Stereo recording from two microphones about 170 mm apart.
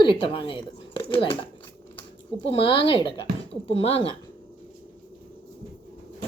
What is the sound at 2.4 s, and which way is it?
A woman's voice, 30° left (ahead or behind).